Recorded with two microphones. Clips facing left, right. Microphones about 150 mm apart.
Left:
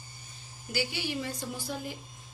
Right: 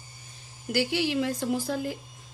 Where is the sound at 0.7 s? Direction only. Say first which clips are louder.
Right 7 dB; 85° right.